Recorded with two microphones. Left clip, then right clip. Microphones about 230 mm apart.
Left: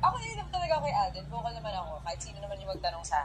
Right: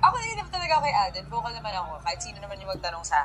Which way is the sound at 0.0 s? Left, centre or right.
Right.